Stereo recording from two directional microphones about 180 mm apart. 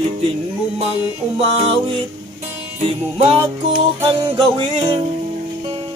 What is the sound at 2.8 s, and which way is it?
Music, 30° right (ahead or behind).